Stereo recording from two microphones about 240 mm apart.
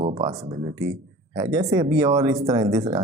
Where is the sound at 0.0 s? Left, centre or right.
Right.